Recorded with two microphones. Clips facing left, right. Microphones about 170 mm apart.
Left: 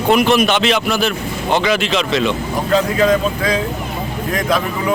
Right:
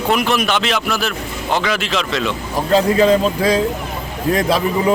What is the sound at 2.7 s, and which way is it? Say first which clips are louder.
Speech: right 2 dB; 30° right (ahead or behind).